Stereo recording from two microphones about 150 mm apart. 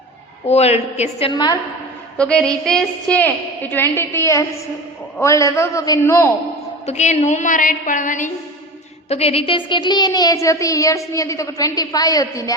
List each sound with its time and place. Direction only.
0.4 s a woman's voice: 45° left (ahead or behind)
1.3 s a woman's voice: 30° left (ahead or behind)
2.1 s a woman's voice: 5° left (ahead or behind)
6.8 s a woman's voice: 50° left (ahead or behind)
9.0 s a woman's voice: 45° left (ahead or behind); by 12.5 s 20° left (ahead or behind)